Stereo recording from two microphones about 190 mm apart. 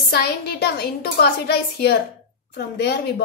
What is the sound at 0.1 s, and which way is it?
A woman's voice, 55° left (ahead or behind).